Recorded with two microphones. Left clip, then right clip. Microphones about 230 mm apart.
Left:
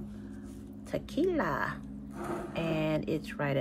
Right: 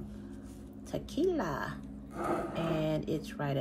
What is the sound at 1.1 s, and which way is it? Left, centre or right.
Speech, centre.